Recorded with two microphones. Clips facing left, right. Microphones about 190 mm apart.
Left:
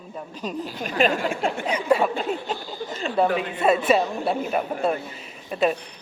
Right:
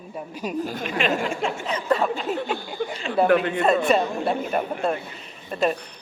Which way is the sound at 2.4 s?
60° right (ahead or behind).